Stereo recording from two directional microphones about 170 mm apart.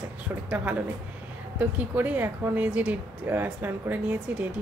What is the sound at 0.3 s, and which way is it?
A woman's voice, 10° right (ahead or behind).